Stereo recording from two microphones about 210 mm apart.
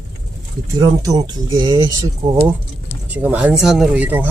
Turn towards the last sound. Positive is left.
turn(degrees=-10)  # may be behind; listen again after turning